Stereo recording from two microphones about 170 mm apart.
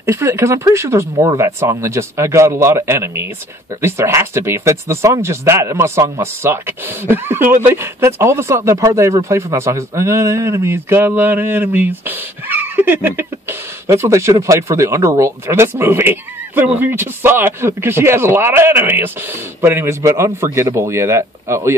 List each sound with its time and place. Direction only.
0.0 s speech: 15° right (ahead or behind)